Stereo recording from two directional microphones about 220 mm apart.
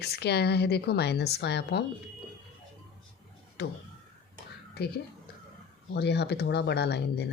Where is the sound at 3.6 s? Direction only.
50° left (ahead or behind).